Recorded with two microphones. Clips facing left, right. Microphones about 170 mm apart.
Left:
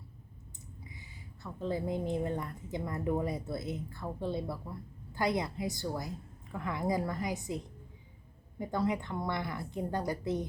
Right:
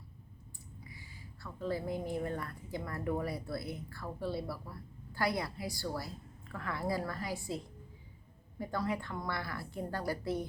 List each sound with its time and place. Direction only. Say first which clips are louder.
0.9 s a woman's voice: left 1 dB; 20° left (ahead or behind)